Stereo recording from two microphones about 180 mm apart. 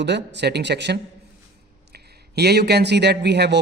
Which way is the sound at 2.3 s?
65° right (ahead or behind).